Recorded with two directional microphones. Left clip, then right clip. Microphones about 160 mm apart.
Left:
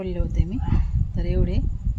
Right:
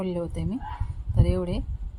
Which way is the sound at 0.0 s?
20° right (ahead or behind).